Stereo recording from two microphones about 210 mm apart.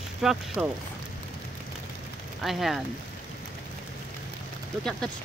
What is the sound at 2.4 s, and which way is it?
Speech, centre (ahead or behind).